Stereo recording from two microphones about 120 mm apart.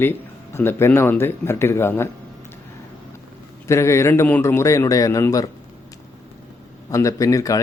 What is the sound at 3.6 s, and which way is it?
A man's voice, 25° left (ahead or behind).